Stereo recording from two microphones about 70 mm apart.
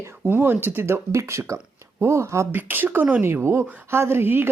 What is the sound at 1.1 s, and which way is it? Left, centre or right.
Speech, right.